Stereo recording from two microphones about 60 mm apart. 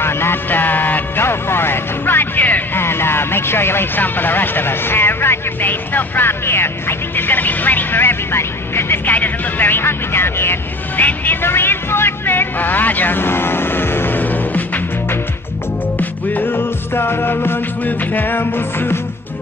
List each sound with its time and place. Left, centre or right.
0.0 s vehicle: left
2.8 s speech: left
16.0 s speech: left